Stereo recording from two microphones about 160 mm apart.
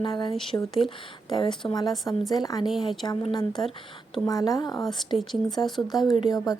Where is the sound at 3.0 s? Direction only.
30° left (ahead or behind).